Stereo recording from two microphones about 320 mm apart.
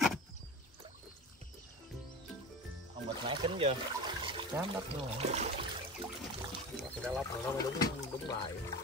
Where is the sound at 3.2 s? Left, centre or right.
Centre.